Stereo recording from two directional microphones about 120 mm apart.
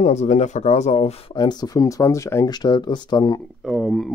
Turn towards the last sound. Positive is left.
turn(degrees=0)  # may be behind; listen again after turning